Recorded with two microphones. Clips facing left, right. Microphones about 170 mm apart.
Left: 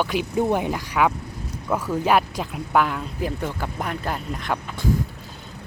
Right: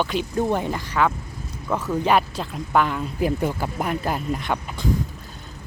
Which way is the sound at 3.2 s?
10° right (ahead or behind).